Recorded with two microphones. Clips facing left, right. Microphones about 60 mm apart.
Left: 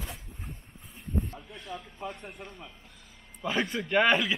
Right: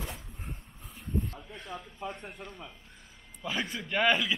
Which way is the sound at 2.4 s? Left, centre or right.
Centre.